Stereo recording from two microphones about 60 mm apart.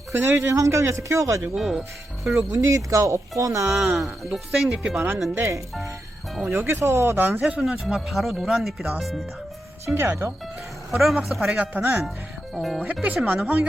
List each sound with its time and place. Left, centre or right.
0.1 s speech: right
1.5 s speech: centre
2.6 s speech: right
3.7 s speech: centre
4.7 s speech: centre
4.9 s speech: right
6.5 s speech: right
7.6 s speech: centre
9.8 s speech: right
10.9 s speech: centre
11.5 s speech: right
12.5 s speech: centre
12.8 s speech: right